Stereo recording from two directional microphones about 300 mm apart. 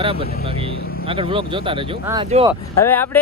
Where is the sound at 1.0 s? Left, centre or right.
Centre.